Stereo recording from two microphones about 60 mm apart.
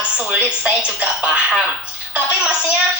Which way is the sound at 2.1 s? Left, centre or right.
Right.